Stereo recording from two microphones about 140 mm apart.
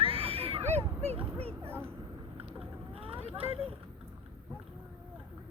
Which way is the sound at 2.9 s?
40° right (ahead or behind).